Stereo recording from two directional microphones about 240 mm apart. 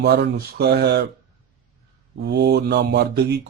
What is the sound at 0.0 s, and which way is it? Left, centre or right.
Speech, right.